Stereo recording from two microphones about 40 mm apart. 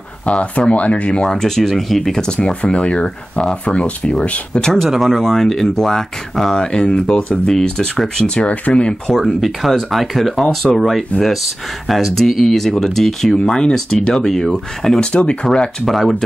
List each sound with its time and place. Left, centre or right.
0.2 s speech: left
1.3 s speech: centre
2.2 s speech: left
4.7 s speech: centre
8.5 s speech: left
9.1 s speech: centre
15.0 s speech: left
15.8 s speech: centre